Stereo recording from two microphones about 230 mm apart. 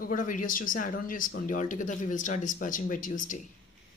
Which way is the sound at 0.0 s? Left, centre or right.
Left.